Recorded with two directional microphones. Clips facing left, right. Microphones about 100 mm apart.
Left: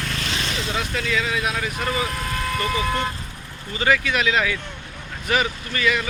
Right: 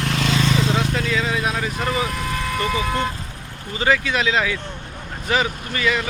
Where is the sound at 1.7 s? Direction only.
5° right (ahead or behind).